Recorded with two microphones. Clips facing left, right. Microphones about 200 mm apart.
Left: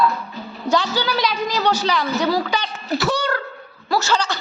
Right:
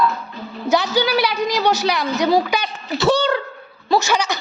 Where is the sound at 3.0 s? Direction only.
25° right (ahead or behind).